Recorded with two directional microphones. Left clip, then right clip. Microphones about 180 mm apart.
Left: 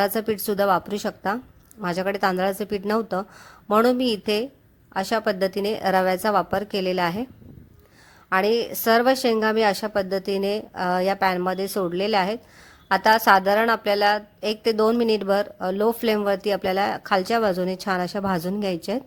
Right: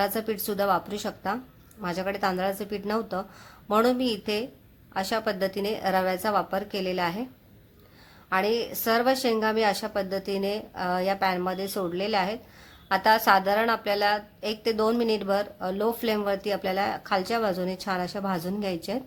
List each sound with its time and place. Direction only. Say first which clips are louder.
0.0 s a woman's voice: left 4 dB; 40° left (ahead or behind)
8.3 s a woman's voice: left 5 dB; 40° left (ahead or behind)